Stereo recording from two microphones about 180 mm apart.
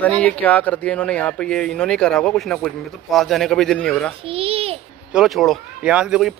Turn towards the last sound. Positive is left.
turn(degrees=-5)  # may be behind; listen again after turning